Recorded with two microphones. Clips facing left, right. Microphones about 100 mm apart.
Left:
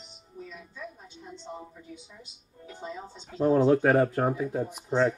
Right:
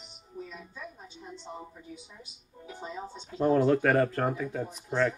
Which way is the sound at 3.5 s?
15° left (ahead or behind).